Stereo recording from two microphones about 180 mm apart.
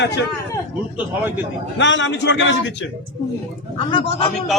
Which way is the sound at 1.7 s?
90° left.